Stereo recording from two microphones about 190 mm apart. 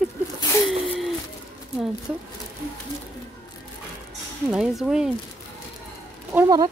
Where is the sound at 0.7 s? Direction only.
Centre (ahead or behind).